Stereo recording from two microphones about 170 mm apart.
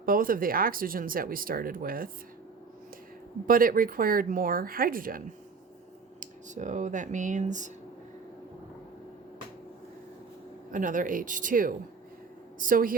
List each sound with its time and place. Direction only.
0.0 s speech: 55° right (ahead or behind)
3.4 s speech: 55° right (ahead or behind)
10.7 s speech: 50° right (ahead or behind)